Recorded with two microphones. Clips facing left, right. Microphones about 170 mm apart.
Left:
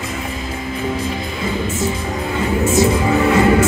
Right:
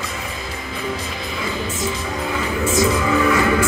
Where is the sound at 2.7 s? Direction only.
30° left (ahead or behind).